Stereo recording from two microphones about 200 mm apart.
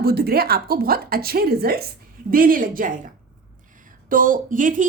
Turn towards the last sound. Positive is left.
turn(degrees=-40)  # may be behind; listen again after turning